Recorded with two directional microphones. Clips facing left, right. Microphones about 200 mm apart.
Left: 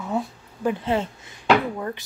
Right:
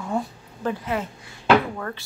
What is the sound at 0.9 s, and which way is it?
Speech, 25° left (ahead or behind).